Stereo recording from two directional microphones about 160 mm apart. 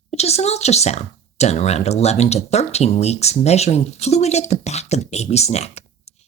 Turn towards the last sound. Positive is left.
turn(degrees=40)  # may be behind; listen again after turning